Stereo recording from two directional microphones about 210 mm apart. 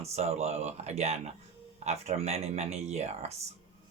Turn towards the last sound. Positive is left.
turn(degrees=-30)  # may be behind; listen again after turning